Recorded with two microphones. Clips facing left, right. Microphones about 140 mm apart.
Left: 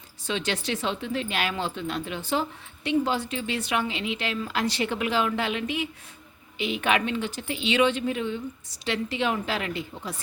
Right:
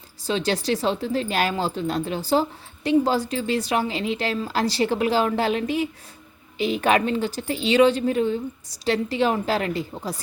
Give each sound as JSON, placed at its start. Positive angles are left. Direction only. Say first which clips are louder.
{"t": 0.2, "sound": "speech", "louder": "right 5 dB", "side_deg": -35}